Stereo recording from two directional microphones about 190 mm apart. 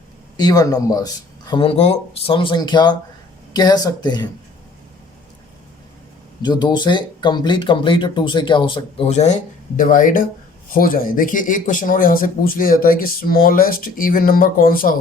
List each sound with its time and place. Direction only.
0.3 s speech: 20° left (ahead or behind)
6.4 s speech: 20° left (ahead or behind); by 14.9 s 50° left (ahead or behind)